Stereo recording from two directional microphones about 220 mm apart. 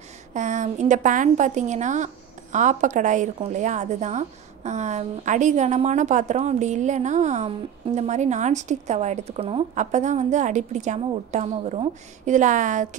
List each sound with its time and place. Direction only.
0.3 s a woman's voice: 35° right (ahead or behind)